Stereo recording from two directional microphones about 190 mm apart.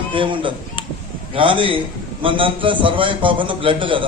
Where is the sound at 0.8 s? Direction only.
25° left (ahead or behind).